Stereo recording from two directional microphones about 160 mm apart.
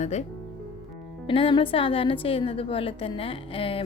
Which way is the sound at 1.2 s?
35° left (ahead or behind).